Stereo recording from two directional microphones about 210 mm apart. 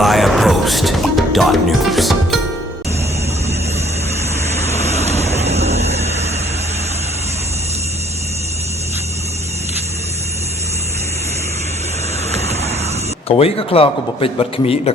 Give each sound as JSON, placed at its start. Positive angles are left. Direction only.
{"t": 0.0, "sound": "music", "side_deg": 0}
{"t": 4.9, "sound": "vehicle", "side_deg": -30}
{"t": 12.3, "sound": "vehicle", "side_deg": -30}
{"t": 13.2, "sound": "speech", "side_deg": 25}